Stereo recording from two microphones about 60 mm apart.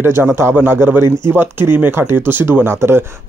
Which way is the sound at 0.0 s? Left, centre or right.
Right.